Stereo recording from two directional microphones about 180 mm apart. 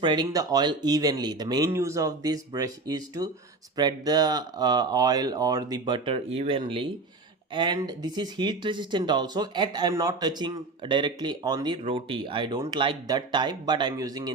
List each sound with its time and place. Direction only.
0.0 s speech: 25° right (ahead or behind)